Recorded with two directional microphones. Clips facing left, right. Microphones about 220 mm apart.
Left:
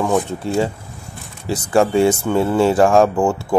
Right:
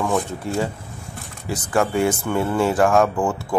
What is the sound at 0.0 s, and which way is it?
Speech, 20° left (ahead or behind).